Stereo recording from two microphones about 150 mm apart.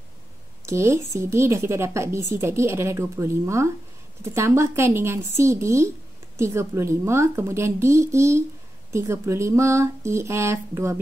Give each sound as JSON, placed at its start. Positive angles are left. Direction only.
{"t": 0.7, "sound": "a woman's voice", "side_deg": -20}